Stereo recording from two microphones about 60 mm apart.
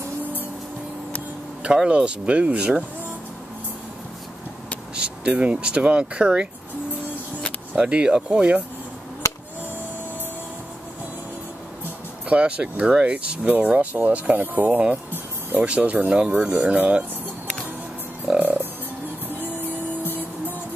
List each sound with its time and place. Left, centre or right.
1.9 s speech: centre
4.9 s speech: centre
7.7 s speech: centre
12.3 s speech: centre
18.4 s music: right
20.0 s music: right